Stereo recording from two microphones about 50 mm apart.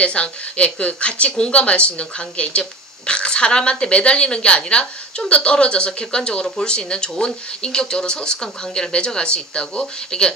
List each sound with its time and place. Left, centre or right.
0.0 s speech: left